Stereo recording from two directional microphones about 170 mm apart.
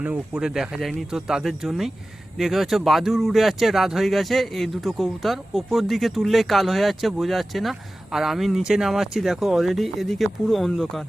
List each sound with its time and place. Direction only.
0.0 s speech: 5° right (ahead or behind)